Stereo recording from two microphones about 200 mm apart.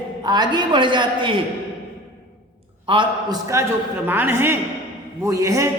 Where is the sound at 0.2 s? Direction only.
20° right (ahead or behind).